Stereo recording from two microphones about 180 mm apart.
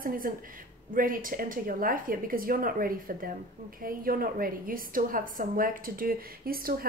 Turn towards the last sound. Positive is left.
turn(degrees=-55)  # may be behind; listen again after turning